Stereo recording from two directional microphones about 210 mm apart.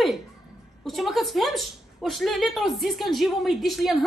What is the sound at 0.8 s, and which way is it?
A woman's voice, centre (ahead or behind).